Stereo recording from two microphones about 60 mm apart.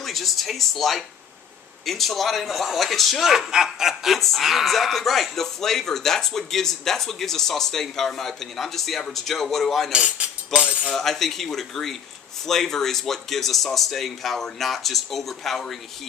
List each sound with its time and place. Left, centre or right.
0.0 s speech: centre
9.9 s speech: centre
10.9 s speech: centre